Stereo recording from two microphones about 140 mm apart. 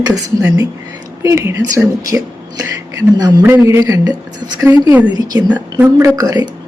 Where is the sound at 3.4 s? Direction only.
20° right (ahead or behind).